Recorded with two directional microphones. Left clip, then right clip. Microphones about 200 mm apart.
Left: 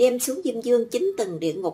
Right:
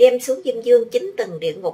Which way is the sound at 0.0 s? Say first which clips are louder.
Right 7 dB; 40° left (ahead or behind).